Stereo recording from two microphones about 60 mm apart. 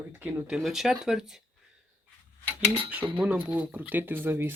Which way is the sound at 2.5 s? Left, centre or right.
Right.